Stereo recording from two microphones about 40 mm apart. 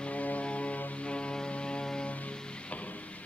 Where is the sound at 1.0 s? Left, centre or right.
Left.